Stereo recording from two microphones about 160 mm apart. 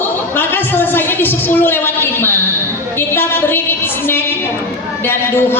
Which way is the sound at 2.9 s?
15° left (ahead or behind).